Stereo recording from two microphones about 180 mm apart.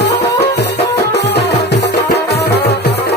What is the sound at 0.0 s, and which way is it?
Music, 70° left (ahead or behind).